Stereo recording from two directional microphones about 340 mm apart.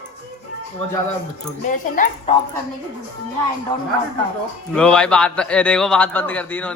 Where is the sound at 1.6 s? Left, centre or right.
Left.